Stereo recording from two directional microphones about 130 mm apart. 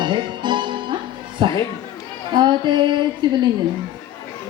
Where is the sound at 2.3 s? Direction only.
35° right (ahead or behind).